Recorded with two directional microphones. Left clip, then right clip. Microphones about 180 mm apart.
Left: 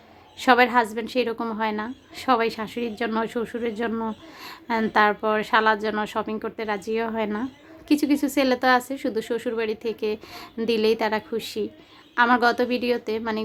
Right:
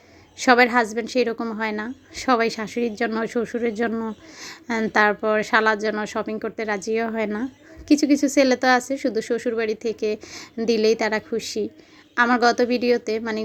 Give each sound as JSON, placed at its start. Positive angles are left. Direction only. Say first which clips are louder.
{"t": 0.3, "sound": "a woman's voice", "louder": "right 1 dB", "side_deg": -15}